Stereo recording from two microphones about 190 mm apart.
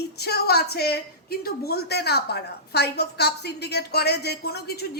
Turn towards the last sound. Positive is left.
turn(degrees=55)  # may be behind; listen again after turning